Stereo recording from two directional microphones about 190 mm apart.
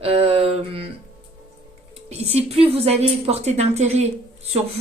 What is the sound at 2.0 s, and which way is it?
A woman's voice, 35° right (ahead or behind).